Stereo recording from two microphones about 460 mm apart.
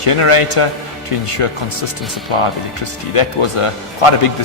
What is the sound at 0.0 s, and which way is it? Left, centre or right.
Speech, left.